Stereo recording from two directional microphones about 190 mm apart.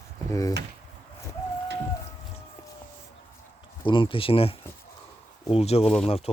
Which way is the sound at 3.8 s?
25° left (ahead or behind).